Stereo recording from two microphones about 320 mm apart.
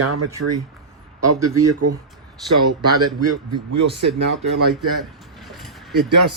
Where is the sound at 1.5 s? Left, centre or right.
Right.